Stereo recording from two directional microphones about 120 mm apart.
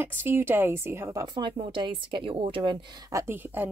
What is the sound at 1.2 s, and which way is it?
Speech, 40° right (ahead or behind).